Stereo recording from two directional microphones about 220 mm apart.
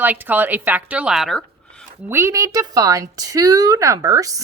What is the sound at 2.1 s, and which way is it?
Speech, 10° right (ahead or behind).